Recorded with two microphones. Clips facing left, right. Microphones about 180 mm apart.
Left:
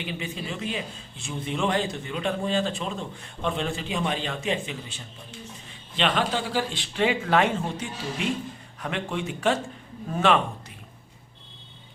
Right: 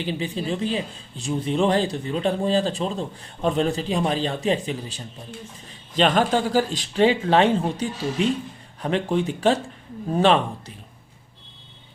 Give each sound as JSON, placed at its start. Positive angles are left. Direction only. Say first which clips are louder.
{"t": 0.0, "sound": "a man's voice", "louder": "right 6 dB", "side_deg": -35}